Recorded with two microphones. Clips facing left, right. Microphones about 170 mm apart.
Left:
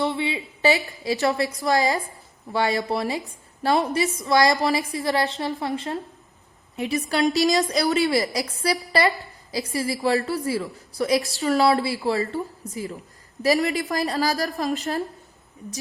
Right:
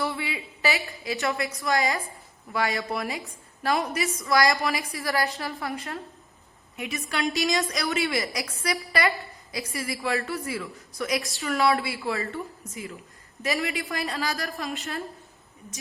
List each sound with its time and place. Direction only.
0.0 s a woman's voice: 25° left (ahead or behind)